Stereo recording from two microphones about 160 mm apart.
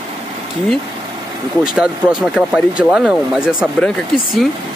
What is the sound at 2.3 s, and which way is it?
Speech, 5° right (ahead or behind).